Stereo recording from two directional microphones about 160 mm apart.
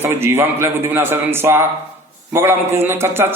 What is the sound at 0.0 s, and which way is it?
A man's voice, 15° right (ahead or behind).